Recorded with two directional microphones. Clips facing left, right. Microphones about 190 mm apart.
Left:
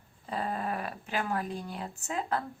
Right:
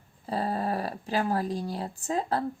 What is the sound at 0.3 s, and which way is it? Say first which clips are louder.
Speech: right 4 dB; 35° right (ahead or behind).